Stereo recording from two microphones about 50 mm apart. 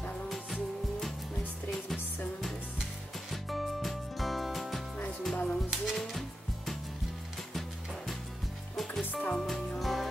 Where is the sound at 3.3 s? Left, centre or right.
Centre.